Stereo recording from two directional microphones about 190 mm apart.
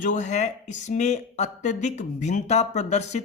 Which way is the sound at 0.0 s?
40° left (ahead or behind).